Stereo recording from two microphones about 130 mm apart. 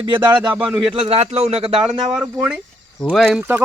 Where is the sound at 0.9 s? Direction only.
45° right (ahead or behind).